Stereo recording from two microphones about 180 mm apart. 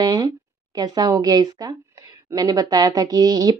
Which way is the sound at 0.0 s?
20° right (ahead or behind).